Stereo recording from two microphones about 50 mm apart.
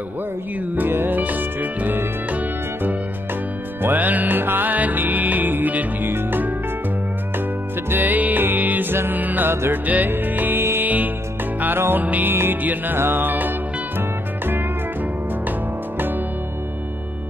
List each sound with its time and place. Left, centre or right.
0.7 s music: right
7.9 s music: right
9.2 s music: right
9.5 s music: right
9.8 s music: right
12.0 s music: right